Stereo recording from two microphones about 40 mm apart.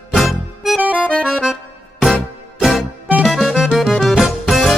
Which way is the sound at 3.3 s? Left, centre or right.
Centre.